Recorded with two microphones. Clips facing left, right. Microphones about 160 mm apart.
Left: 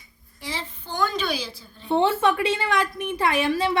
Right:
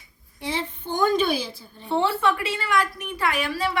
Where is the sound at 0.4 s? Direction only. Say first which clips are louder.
Right 5 dB; 55° right (ahead or behind).